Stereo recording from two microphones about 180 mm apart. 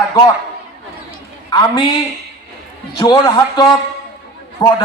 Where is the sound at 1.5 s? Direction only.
25° left (ahead or behind).